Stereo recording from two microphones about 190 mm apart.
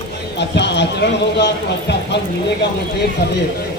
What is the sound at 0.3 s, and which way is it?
A man's voice, 65° left (ahead or behind).